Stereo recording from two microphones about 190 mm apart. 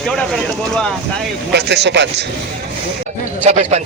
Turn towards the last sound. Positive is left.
turn(degrees=-35)  # may be behind; listen again after turning